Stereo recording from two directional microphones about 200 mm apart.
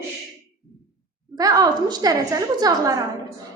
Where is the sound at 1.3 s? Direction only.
20° right (ahead or behind).